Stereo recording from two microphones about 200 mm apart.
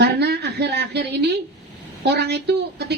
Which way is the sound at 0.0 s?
55° right (ahead or behind).